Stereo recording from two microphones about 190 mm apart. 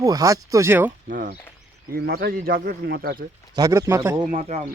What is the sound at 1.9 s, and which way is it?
A man's voice, 55° right (ahead or behind).